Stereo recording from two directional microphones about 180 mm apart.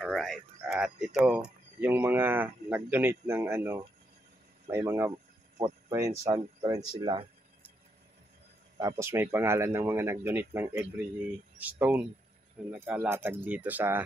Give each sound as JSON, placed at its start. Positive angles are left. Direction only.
{"t": 0.0, "sound": "speech", "side_deg": 0}
{"t": 8.7, "sound": "speech", "side_deg": -20}